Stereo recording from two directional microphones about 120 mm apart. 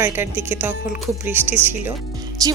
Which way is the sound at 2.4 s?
30° right (ahead or behind).